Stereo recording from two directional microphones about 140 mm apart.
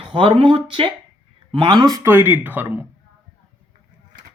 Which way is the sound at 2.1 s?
15° right (ahead or behind).